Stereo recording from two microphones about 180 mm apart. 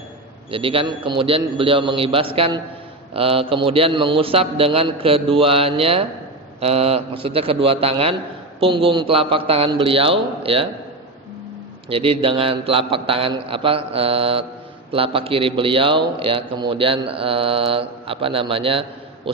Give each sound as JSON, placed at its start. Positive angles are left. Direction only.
{"t": 0.5, "sound": "a man's voice", "side_deg": -30}
{"t": 11.9, "sound": "a man's voice", "side_deg": -30}